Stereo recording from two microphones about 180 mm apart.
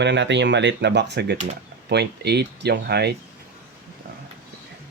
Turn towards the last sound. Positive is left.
turn(degrees=-65)  # may be behind; listen again after turning